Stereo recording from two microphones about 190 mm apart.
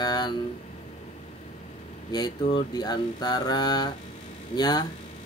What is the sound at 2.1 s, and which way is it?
Speech, 25° left (ahead or behind).